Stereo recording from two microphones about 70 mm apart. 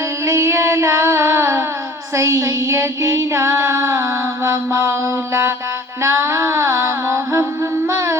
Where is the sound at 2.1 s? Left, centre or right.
Right.